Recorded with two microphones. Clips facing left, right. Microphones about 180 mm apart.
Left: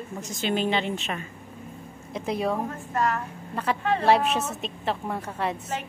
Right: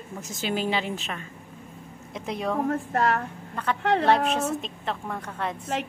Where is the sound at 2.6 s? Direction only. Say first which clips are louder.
Right 3 dB; 65° right (ahead or behind).